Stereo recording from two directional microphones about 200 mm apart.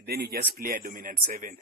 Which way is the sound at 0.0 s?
50° right (ahead or behind).